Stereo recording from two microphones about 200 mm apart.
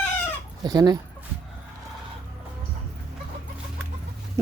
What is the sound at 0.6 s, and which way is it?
Speech, 20° right (ahead or behind).